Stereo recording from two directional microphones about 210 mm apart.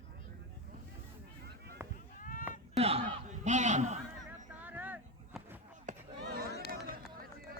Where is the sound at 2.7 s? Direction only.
30° right (ahead or behind).